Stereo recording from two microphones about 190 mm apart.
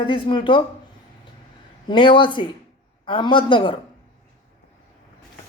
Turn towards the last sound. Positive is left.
turn(degrees=25)  # may be behind; listen again after turning